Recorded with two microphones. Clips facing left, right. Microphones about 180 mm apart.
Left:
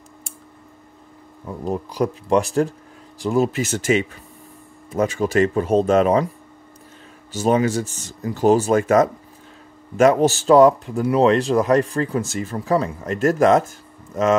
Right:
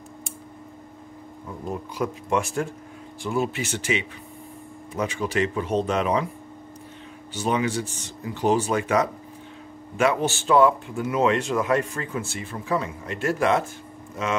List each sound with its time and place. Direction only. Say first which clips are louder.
1.6 s speech: left 6 dB; 35° left (ahead or behind)
7.3 s speech: left 6 dB; 40° left (ahead or behind)